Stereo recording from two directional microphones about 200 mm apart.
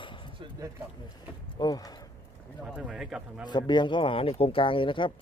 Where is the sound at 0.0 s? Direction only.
25° left (ahead or behind).